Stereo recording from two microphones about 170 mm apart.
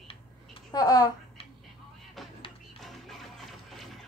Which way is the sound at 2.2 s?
Centre (ahead or behind).